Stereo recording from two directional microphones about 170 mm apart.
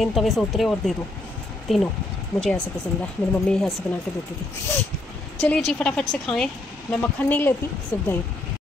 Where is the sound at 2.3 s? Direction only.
20° left (ahead or behind).